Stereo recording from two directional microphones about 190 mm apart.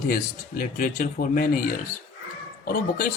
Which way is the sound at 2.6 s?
50° left (ahead or behind).